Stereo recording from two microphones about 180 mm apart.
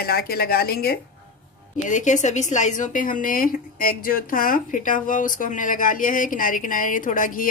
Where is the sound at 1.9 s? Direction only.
45° left (ahead or behind).